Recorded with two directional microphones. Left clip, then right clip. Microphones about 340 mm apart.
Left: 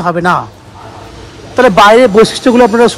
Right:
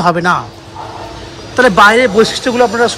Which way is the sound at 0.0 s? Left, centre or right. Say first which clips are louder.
Even; centre.